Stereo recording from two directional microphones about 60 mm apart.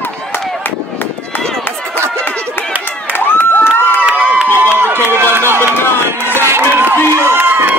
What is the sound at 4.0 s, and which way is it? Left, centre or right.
Crowd, right.